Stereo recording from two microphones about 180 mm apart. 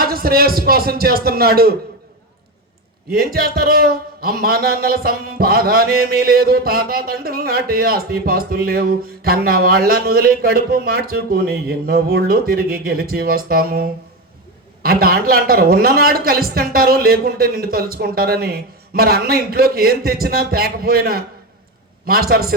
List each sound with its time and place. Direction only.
0.0 s a man's voice: 55° right (ahead or behind)
3.1 s a man's voice: 55° right (ahead or behind)